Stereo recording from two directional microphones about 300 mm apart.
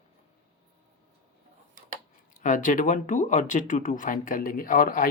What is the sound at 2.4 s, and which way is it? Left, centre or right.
Speech, left.